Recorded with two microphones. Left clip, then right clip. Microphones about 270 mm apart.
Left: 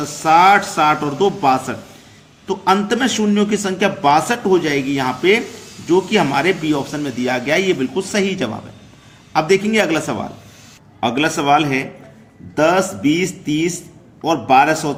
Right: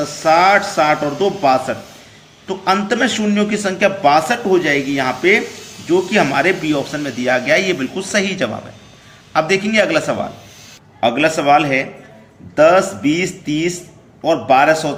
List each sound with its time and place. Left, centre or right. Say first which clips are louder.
0.2 s a man's voice: left 1 dB; left